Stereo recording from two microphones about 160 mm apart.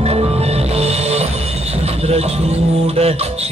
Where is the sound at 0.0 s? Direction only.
40° right (ahead or behind).